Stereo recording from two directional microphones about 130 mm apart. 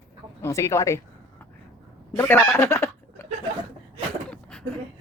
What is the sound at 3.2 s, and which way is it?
Chuckle, 15° left (ahead or behind).